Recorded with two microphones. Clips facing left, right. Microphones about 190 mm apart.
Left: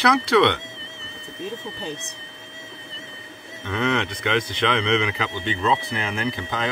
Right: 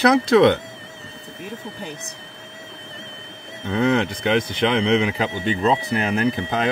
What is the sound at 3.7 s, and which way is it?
A man's voice, 35° right (ahead or behind).